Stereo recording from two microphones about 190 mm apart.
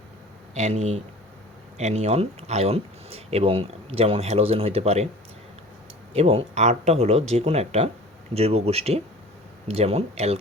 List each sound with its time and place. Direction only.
0.5 s speech: 35° right (ahead or behind)
6.1 s speech: 30° right (ahead or behind)